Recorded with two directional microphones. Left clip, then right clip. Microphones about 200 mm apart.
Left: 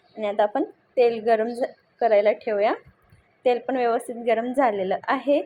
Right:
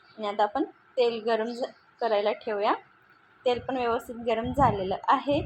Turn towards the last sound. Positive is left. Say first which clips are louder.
# left 2 dB
turn(degrees=15)  # may be behind; listen again after turning